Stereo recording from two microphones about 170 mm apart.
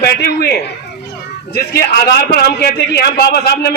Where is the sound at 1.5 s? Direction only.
70° left (ahead or behind).